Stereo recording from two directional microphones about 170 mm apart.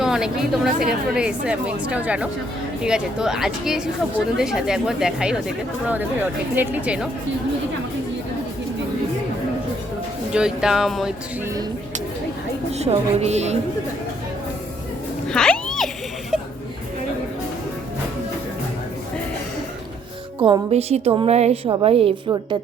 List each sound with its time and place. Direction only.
0.0 s a woman's voice: 5° right (ahead or behind)
6.6 s a woman's voice: 5° right (ahead or behind)
10.3 s a woman's voice: 5° right (ahead or behind)
12.8 s a woman's voice: 40° right (ahead or behind)
15.3 s music: 5° left (ahead or behind)
20.4 s a woman's voice: 30° right (ahead or behind)